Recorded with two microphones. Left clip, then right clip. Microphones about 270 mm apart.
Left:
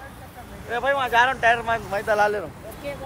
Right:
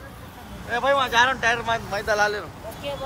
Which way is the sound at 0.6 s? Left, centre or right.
Centre.